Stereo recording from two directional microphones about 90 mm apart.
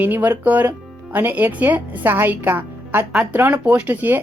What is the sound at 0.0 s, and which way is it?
Speech, 20° right (ahead or behind).